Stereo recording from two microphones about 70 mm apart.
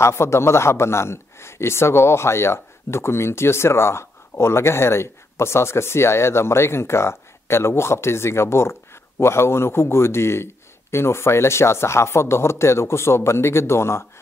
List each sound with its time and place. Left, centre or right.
0.0 s a man's voice: left